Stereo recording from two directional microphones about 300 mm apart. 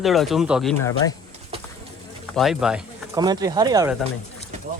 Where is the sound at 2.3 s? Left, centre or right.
Centre.